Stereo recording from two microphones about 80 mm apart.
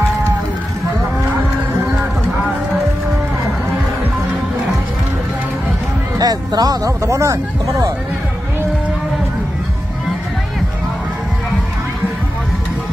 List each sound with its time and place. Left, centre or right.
6.1 s speech: right